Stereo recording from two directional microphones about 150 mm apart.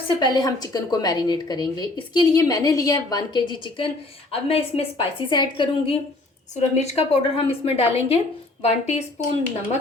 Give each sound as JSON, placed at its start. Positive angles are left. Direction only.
{"t": 0.2, "sound": "a woman's voice", "side_deg": 25}